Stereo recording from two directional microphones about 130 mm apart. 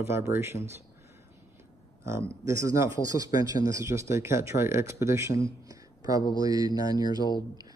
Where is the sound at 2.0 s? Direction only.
20° right (ahead or behind).